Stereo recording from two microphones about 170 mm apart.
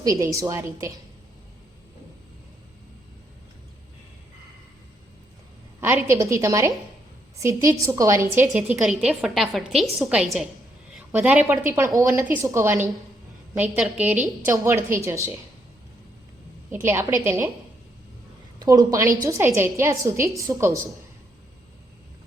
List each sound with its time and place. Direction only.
0.0 s a woman's voice: 20° right (ahead or behind)
5.8 s a woman's voice: 15° right (ahead or behind)
16.7 s a woman's voice: 15° right (ahead or behind)
18.6 s a woman's voice: 20° right (ahead or behind)